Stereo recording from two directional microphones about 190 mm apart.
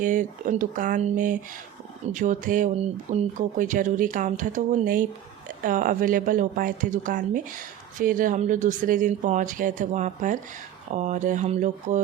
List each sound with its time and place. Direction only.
0.0 s a woman's voice: 45° right (ahead or behind)